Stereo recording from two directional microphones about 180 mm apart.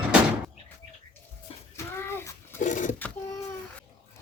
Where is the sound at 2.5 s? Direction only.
45° left (ahead or behind).